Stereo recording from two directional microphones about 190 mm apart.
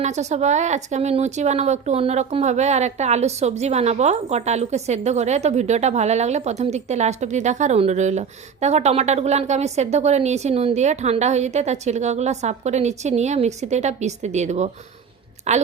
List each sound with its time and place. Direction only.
0.0 s a woman's voice: 35° right (ahead or behind)